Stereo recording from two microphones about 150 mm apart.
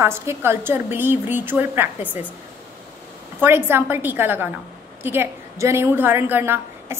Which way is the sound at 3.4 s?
15° right (ahead or behind).